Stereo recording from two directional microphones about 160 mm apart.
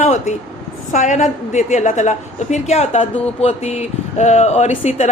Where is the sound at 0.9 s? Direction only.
45° left (ahead or behind).